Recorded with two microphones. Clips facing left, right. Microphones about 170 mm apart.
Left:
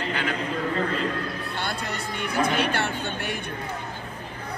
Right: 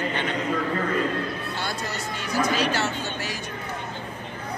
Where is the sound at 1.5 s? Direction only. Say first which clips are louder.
Even; 60° left (ahead or behind).